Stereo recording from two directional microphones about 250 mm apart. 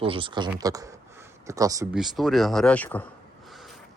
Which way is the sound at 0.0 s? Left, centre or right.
Right.